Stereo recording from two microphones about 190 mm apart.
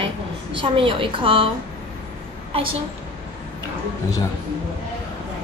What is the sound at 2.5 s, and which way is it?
Speech, 30° right (ahead or behind).